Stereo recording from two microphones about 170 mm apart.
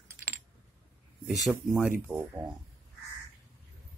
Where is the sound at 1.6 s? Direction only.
Centre (ahead or behind).